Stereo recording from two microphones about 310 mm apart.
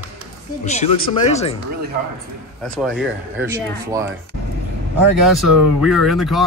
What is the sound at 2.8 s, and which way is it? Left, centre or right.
Speech, centre.